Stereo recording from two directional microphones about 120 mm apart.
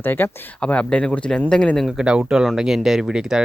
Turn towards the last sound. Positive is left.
turn(degrees=-5)  # may be behind; listen again after turning